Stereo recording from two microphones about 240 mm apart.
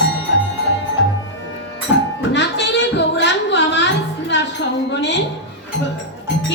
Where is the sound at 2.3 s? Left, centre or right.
Left.